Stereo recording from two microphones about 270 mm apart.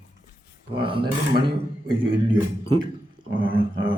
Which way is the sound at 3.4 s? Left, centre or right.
Right.